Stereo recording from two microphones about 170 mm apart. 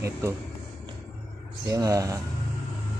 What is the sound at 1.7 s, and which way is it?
Speech, 20° right (ahead or behind).